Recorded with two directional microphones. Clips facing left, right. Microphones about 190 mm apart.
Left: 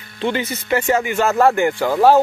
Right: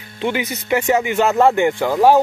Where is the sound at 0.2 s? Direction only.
15° right (ahead or behind).